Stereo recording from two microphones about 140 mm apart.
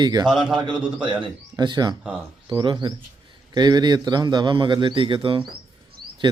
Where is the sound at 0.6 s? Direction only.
35° right (ahead or behind).